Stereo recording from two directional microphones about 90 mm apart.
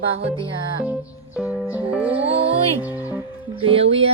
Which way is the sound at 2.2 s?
90° right.